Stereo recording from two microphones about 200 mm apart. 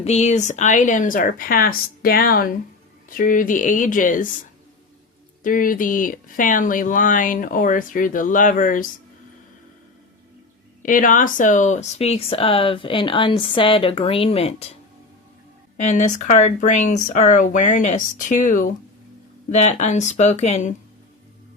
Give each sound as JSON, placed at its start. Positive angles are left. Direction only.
{"t": 0.0, "sound": "speech", "side_deg": 35}
{"t": 5.4, "sound": "speech", "side_deg": 40}
{"t": 10.8, "sound": "speech", "side_deg": 40}
{"t": 15.8, "sound": "speech", "side_deg": 40}